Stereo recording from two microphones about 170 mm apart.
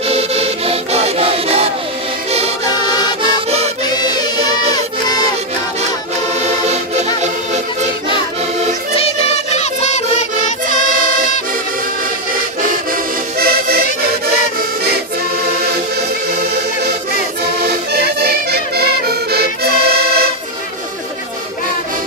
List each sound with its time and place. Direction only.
0.1 s music: 35° right (ahead or behind)
3.2 s music: 40° right (ahead or behind)
3.8 s music: 25° left (ahead or behind)
9.5 s music: 40° left (ahead or behind)
12.9 s music: 60° right (ahead or behind)
18.2 s music: 70° right (ahead or behind)